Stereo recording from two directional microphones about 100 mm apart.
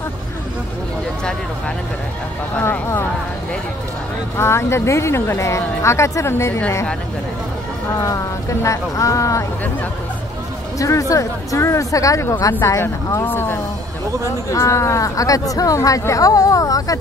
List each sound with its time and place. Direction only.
2.5 s a sound: 20° left (ahead or behind)
4.4 s speech: 25° left (ahead or behind)
8.0 s speech: 30° left (ahead or behind)
10.8 s speech: 35° left (ahead or behind)